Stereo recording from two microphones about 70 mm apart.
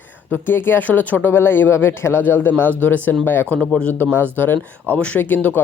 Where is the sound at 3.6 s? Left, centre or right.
Centre.